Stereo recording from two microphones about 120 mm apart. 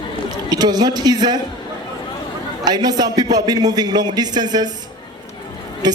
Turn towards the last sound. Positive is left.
turn(degrees=-35)  # may be behind; listen again after turning